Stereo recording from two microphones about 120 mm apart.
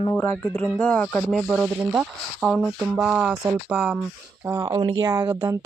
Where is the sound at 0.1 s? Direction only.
15° left (ahead or behind); by 4.0 s 5° right (ahead or behind).